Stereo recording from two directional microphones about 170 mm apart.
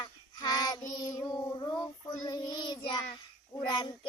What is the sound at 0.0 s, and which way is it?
Child singing, 25° left (ahead or behind).